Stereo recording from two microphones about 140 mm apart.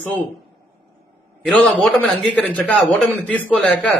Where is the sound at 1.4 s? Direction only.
10° left (ahead or behind).